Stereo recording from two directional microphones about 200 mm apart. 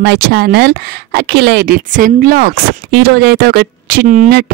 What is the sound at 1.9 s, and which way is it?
A woman's voice, 40° right (ahead or behind).